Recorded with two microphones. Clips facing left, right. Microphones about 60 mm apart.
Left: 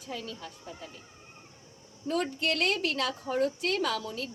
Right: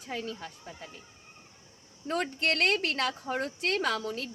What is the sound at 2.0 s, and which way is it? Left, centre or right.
A woman's voice, right.